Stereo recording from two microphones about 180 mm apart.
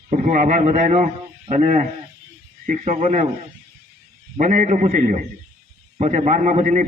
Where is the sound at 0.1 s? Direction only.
45° right (ahead or behind).